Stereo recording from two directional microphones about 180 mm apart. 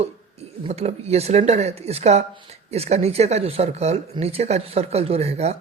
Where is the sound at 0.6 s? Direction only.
35° right (ahead or behind).